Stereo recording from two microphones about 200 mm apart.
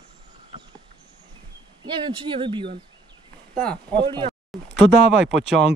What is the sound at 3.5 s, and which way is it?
Speech, 5° left (ahead or behind).